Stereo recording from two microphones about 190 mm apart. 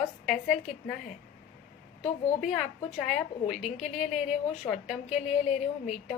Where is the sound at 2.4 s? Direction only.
Centre (ahead or behind).